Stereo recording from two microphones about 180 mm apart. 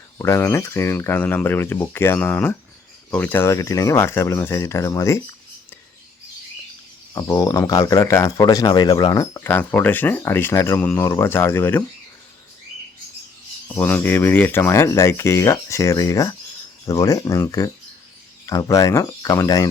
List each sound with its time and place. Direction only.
0.2 s speech: 15° left (ahead or behind)
7.1 s speech: 20° left (ahead or behind)
13.7 s speech: 10° left (ahead or behind)